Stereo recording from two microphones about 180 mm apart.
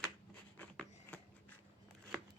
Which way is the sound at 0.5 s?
10° left (ahead or behind).